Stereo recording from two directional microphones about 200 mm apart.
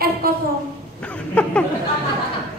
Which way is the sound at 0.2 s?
50° right (ahead or behind).